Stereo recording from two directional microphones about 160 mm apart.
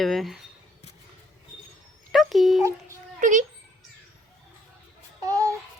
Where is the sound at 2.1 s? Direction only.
Centre (ahead or behind).